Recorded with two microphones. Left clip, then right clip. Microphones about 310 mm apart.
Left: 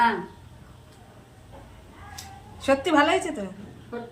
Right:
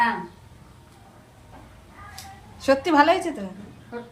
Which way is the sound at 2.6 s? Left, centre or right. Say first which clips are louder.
Right 2 dB; centre.